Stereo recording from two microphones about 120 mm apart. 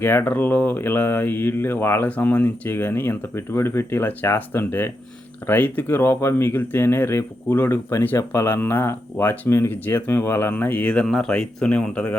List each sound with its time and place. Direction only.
0.0 s speech: 15° left (ahead or behind)